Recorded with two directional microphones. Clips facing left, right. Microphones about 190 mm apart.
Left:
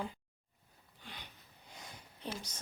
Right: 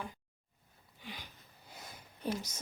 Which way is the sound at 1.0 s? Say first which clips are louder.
Right 4 dB; 5° right (ahead or behind).